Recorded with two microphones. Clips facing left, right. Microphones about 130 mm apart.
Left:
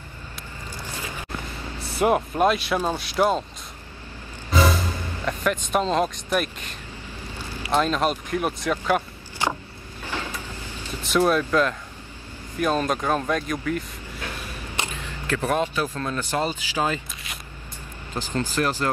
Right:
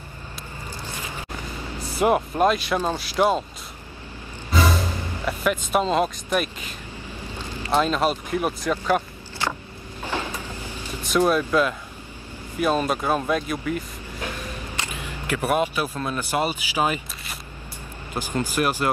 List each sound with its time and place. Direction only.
2.0 s speech: centre (ahead or behind)
5.2 s speech: 5° right (ahead or behind)
9.4 s vehicle: 15° left (ahead or behind)
10.0 s a sound: 15° right (ahead or behind)
11.1 s speech: 5° right (ahead or behind)
15.0 s speech: 15° right (ahead or behind)
18.1 s speech: 15° right (ahead or behind)